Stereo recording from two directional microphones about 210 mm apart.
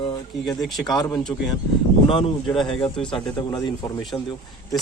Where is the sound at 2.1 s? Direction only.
25° left (ahead or behind).